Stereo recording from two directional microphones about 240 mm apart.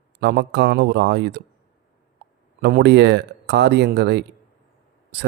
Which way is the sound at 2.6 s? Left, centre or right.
Right.